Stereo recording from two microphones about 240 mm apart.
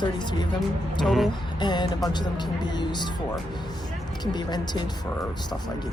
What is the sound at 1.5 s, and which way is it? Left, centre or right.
Speech, centre.